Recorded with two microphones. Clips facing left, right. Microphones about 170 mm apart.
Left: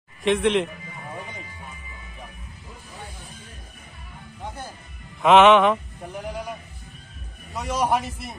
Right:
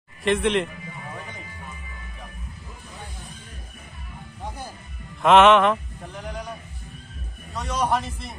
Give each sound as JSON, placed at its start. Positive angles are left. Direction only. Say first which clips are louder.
{"t": 0.2, "sound": "a man's voice", "louder": "left 1 dB", "side_deg": 0}
{"t": 5.2, "sound": "mantra", "louder": "left 1 dB", "side_deg": 0}
{"t": 7.5, "sound": "a man's voice", "louder": "left 1 dB", "side_deg": 10}